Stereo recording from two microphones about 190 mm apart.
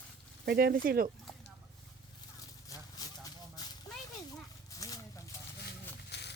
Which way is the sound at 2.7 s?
20° left (ahead or behind).